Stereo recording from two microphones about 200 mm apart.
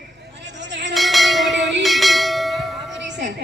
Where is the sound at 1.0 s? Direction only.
Centre (ahead or behind).